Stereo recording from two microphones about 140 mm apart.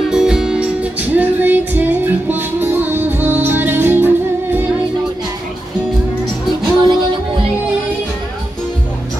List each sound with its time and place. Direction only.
0.1 s music: 5° right (ahead or behind)
6.8 s music: 35° right (ahead or behind)